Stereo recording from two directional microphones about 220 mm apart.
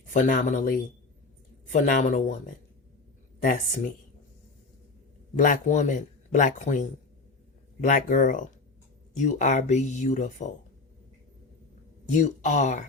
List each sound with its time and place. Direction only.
0.1 s speech: 35° left (ahead or behind)
3.4 s speech: 40° left (ahead or behind)
5.4 s speech: 35° left (ahead or behind)
12.1 s speech: 35° left (ahead or behind)